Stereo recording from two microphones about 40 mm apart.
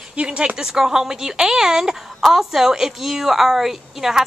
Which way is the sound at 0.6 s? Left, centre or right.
Centre.